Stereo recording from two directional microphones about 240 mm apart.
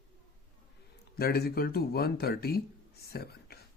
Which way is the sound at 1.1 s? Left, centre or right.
Left.